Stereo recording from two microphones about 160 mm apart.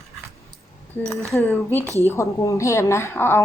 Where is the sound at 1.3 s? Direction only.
15° left (ahead or behind).